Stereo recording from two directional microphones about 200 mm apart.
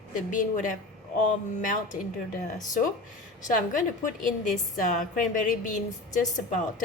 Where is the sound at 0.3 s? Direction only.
40° left (ahead or behind).